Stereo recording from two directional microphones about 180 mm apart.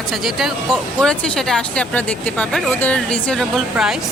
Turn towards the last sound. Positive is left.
turn(degrees=-5)  # may be behind; listen again after turning